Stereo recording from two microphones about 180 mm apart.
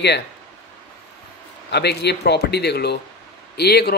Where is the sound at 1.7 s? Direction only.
65° left (ahead or behind).